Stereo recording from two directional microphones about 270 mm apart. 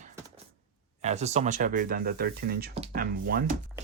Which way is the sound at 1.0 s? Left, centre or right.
Right.